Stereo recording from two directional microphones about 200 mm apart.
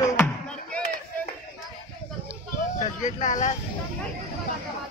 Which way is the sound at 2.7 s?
40° left (ahead or behind).